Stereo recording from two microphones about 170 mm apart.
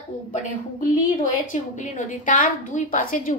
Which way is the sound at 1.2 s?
50° left (ahead or behind).